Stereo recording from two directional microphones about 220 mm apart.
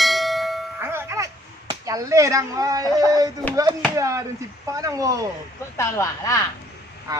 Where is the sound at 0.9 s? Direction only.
10° right (ahead or behind).